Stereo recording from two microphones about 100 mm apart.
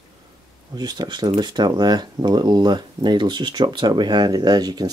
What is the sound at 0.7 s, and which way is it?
Speech, 45° right (ahead or behind).